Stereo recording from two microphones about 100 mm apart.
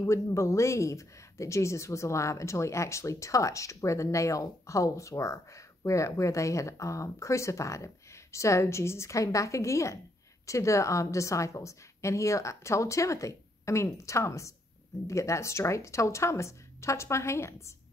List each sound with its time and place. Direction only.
0.0 s speech: 30° left (ahead or behind)